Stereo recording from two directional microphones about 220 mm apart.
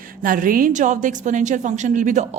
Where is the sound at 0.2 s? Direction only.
40° right (ahead or behind).